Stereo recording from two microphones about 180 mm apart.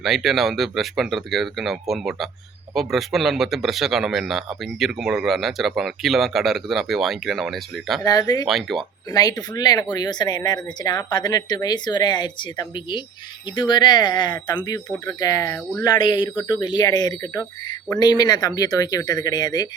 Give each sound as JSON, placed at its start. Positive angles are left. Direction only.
{"t": 0.0, "sound": "speech", "side_deg": 0}
{"t": 8.0, "sound": "speech", "side_deg": 20}
{"t": 8.4, "sound": "speech", "side_deg": 0}
{"t": 9.1, "sound": "speech", "side_deg": 20}